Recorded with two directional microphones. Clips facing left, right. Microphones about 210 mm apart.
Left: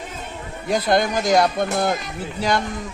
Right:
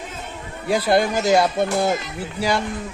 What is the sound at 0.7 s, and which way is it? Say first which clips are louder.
Speech: right 1 dB; 5° right (ahead or behind).